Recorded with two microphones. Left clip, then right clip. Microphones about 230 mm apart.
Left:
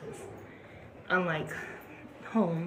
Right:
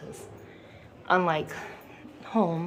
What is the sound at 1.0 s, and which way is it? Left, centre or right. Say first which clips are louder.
A woman's voice: right 6 dB; centre.